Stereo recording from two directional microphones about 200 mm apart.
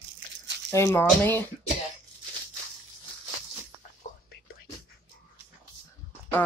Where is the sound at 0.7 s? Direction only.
15° left (ahead or behind).